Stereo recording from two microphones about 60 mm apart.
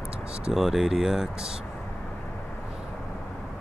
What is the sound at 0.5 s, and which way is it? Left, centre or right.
Speech, centre.